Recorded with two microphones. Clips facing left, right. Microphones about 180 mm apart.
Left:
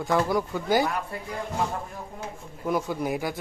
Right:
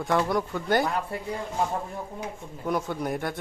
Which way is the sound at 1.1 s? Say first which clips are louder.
Right 2 dB; 25° right (ahead or behind).